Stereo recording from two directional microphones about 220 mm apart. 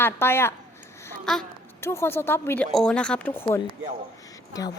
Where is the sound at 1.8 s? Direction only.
10° left (ahead or behind).